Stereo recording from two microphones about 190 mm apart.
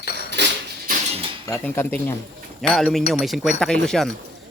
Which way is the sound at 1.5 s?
15° left (ahead or behind).